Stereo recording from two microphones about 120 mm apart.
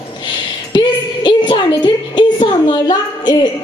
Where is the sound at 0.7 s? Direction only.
40° left (ahead or behind).